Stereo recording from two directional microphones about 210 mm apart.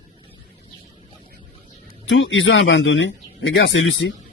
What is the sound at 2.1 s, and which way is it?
Speech, 65° left (ahead or behind).